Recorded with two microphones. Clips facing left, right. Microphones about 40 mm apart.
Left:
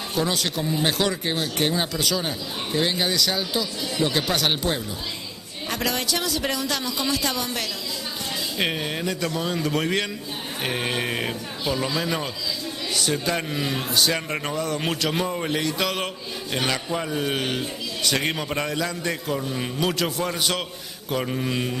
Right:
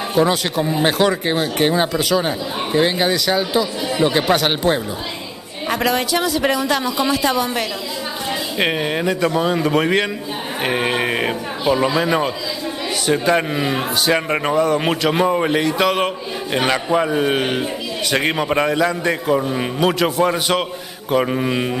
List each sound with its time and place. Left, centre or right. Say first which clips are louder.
0.1 s a man's voice: right 8 dB; centre